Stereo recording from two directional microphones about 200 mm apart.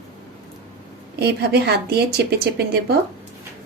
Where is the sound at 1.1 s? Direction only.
55° right (ahead or behind).